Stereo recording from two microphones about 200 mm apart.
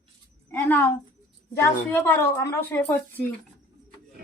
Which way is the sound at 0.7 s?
10° left (ahead or behind).